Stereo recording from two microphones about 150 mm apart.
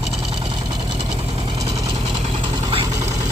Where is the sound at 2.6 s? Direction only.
40° right (ahead or behind).